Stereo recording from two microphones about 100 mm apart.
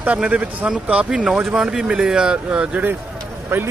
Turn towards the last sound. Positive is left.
turn(degrees=-25)  # may be behind; listen again after turning